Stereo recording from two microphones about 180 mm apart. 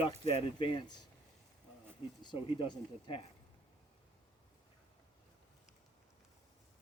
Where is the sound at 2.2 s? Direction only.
25° left (ahead or behind).